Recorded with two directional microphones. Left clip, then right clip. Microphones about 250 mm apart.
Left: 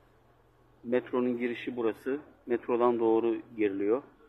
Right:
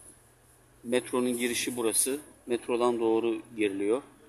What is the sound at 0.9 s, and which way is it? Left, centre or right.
Speech, right.